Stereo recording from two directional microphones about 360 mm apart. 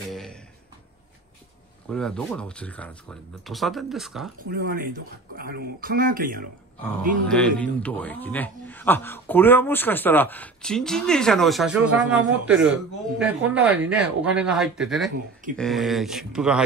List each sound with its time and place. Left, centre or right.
0.1 s a sound: centre
1.9 s a man's voice: centre
4.4 s speech: right
7.2 s a man's voice: centre